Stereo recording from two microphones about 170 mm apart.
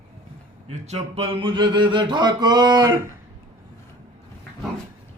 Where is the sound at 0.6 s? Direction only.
40° right (ahead or behind); by 3.0 s 25° right (ahead or behind).